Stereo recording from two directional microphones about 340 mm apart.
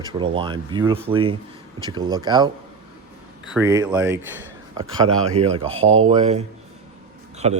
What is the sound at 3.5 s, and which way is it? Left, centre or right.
A man's voice, centre.